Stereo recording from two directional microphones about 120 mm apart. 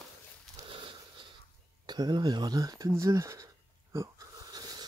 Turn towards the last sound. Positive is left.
turn(degrees=-35)  # may be behind; listen again after turning